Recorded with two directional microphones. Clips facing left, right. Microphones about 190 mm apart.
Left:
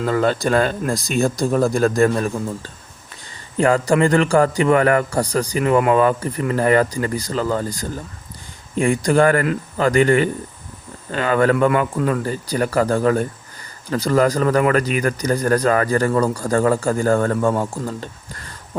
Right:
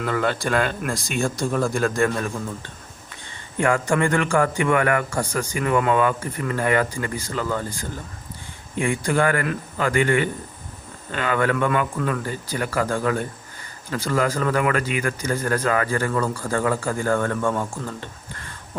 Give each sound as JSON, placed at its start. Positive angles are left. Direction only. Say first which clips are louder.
{"t": 0.0, "sound": "speech", "louder": "left 5 dB", "side_deg": 35}
{"t": 3.6, "sound": "speech", "louder": "left 5 dB", "side_deg": 35}
{"t": 12.2, "sound": "speech", "louder": "left 6 dB", "side_deg": 40}